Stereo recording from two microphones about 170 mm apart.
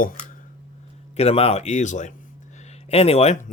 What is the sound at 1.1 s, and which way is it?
Speech, 35° left (ahead or behind).